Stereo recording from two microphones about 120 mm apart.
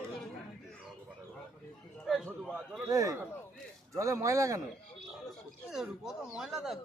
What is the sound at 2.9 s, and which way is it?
Speech, 25° right (ahead or behind).